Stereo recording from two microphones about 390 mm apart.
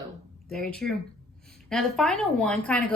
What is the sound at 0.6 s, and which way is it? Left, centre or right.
Speech, left.